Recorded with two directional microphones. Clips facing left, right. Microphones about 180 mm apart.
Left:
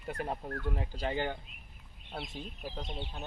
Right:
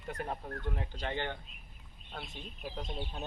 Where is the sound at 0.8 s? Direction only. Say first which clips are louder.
Left 4 dB; 5° left (ahead or behind).